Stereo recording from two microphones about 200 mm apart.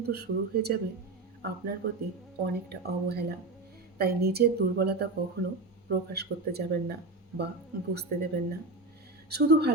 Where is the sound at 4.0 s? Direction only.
50° right (ahead or behind).